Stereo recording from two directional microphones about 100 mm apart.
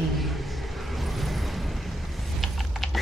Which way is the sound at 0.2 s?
Centre (ahead or behind).